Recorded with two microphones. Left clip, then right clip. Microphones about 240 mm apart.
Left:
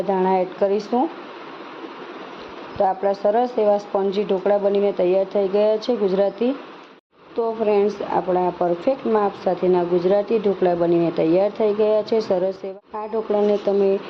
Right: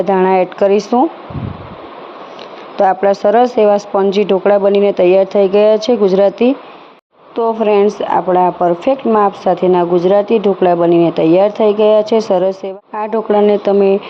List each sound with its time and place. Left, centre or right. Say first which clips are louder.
0.1 s speech: right 7 dB; right
2.7 s speech: right 9 dB; right